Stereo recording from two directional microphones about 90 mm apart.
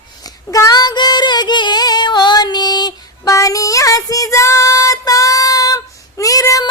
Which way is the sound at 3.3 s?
40° left (ahead or behind).